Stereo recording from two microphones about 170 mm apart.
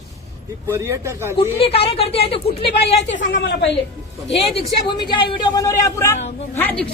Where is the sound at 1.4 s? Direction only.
35° left (ahead or behind).